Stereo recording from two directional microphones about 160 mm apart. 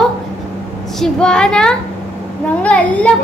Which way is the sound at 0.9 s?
5° left (ahead or behind).